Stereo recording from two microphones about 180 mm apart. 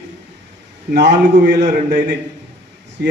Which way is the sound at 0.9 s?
70° right (ahead or behind).